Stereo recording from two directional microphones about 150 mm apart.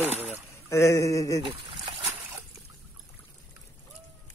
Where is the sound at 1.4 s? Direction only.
35° right (ahead or behind).